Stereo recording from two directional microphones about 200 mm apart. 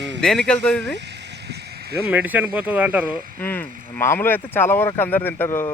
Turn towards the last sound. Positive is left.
turn(degrees=10)  # may be behind; listen again after turning